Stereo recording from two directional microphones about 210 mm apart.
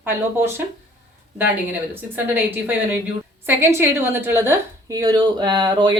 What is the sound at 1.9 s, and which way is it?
A woman's voice, 10° right (ahead or behind).